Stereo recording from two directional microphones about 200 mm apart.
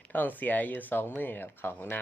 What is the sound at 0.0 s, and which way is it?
Speech, 10° left (ahead or behind).